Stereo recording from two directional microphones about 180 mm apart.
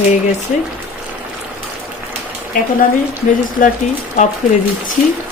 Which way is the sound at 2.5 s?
50° left (ahead or behind).